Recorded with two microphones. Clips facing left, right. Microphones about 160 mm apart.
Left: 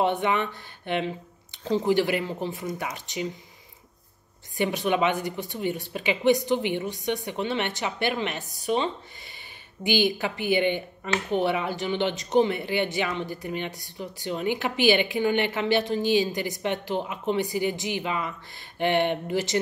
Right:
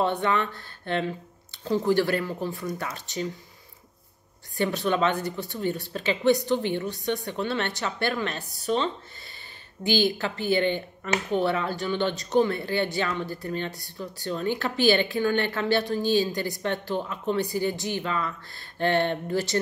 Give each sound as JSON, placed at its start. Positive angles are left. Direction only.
{"t": 0.0, "sound": "speech", "side_deg": 15}
{"t": 4.6, "sound": "speech", "side_deg": 15}